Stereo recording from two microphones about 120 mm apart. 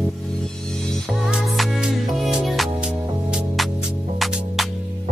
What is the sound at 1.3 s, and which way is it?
Music, centre (ahead or behind).